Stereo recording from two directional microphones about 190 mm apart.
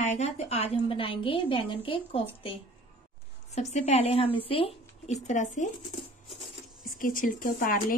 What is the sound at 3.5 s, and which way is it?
A woman's voice, 35° left (ahead or behind).